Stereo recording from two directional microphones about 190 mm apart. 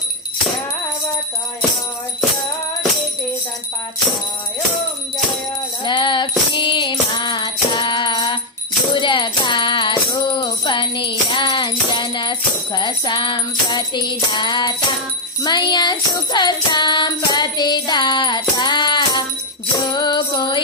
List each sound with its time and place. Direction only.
5.8 s music: 25° left (ahead or behind)